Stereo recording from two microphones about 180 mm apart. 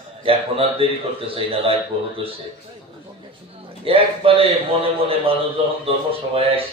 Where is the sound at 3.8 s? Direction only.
30° right (ahead or behind).